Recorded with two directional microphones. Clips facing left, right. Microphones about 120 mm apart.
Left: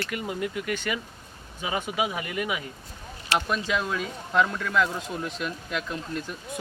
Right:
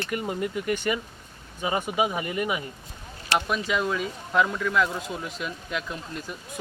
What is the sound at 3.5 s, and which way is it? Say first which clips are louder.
Speech: right 1 dB; centre (ahead or behind).